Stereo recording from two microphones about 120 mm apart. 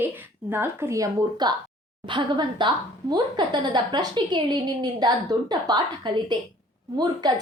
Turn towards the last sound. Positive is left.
turn(degrees=-35)  # may be behind; listen again after turning